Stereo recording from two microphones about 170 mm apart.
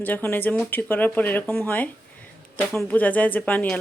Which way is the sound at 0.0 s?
10° left (ahead or behind).